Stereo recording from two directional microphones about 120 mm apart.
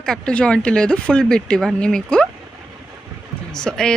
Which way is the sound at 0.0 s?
5° left (ahead or behind).